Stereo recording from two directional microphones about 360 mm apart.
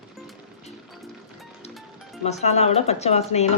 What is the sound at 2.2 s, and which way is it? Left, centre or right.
A woman's voice, centre.